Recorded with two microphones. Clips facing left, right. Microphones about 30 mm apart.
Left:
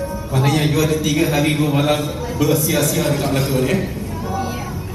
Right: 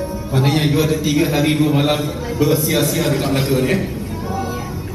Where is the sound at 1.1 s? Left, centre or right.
Centre.